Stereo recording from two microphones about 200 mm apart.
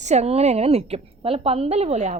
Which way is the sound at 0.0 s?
35° right (ahead or behind).